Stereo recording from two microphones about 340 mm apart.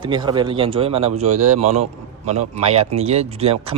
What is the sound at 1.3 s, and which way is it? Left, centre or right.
Speech, right.